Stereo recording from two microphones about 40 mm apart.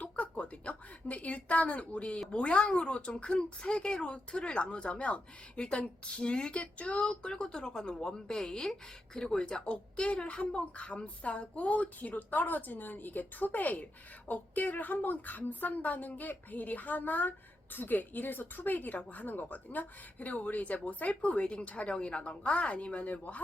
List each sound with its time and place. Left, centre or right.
0.0 s a sound: left
0.7 s a woman's voice: left
7.1 s a woman's voice: left
9.6 s a woman's voice: left